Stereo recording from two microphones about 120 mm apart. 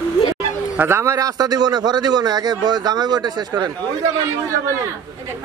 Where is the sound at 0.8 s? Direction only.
20° right (ahead or behind).